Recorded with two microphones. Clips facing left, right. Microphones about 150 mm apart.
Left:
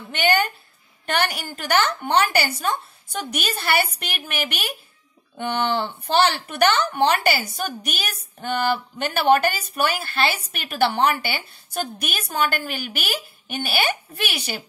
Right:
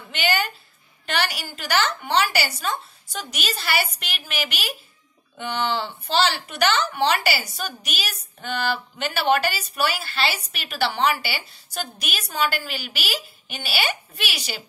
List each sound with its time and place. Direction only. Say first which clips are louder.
0.1 s speech: left 4 dB; 55° left (ahead or behind)